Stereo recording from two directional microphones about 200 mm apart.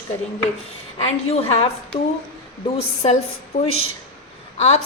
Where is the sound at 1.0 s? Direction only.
30° left (ahead or behind).